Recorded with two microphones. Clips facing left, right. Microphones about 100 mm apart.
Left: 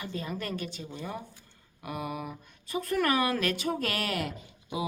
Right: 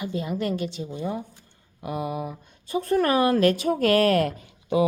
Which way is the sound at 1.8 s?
25° right (ahead or behind).